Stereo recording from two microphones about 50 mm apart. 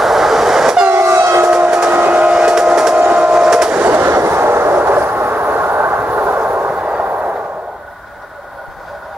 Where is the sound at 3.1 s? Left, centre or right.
Centre.